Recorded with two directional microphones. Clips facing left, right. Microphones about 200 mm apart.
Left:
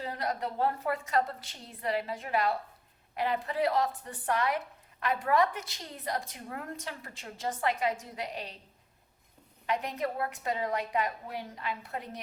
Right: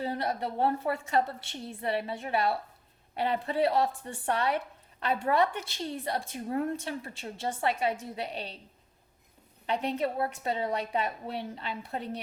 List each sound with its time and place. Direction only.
0.0 s a woman's voice: 30° right (ahead or behind)
9.6 s a woman's voice: 30° right (ahead or behind)